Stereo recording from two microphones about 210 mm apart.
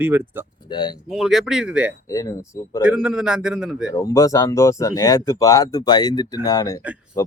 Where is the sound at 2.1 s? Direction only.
15° left (ahead or behind).